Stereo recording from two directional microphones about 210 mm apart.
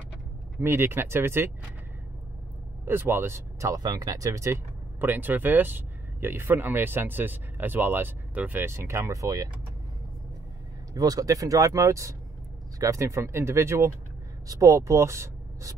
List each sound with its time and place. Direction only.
0.6 s speech: 10° right (ahead or behind)
2.8 s speech: 10° right (ahead or behind)
10.9 s speech: 15° right (ahead or behind)